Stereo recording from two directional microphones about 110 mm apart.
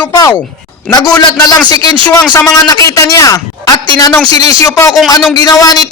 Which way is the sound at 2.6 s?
30° left (ahead or behind).